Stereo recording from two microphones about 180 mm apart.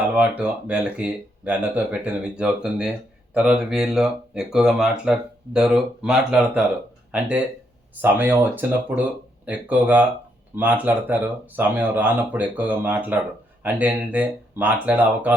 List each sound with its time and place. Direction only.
0.2 s speech: 10° right (ahead or behind)